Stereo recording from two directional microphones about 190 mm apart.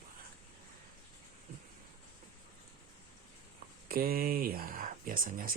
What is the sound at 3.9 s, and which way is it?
Speech, 50° right (ahead or behind).